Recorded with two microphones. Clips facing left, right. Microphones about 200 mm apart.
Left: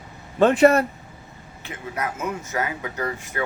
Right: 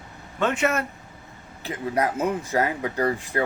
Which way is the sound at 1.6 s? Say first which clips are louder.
Right 5 dB; 35° right (ahead or behind).